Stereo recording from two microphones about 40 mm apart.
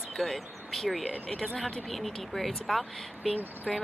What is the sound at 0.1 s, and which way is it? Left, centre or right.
Speech, centre.